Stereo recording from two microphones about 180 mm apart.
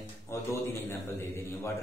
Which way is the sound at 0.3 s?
15° left (ahead or behind).